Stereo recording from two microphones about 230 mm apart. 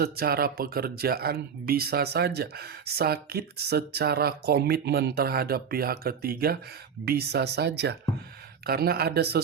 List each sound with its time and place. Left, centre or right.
0.0 s speech: right